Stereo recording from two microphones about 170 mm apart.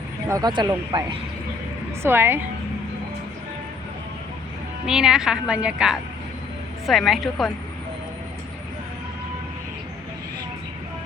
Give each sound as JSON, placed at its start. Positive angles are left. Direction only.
{"t": 0.3, "sound": "a woman's voice", "side_deg": -20}
{"t": 4.9, "sound": "a woman's voice", "side_deg": -5}